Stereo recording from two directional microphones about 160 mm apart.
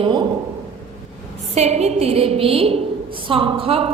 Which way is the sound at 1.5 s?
45° right (ahead or behind).